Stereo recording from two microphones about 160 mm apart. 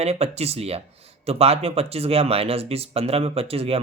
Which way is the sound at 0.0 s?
40° right (ahead or behind).